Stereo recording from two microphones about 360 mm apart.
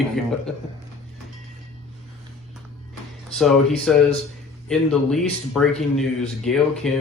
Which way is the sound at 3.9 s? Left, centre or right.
Centre.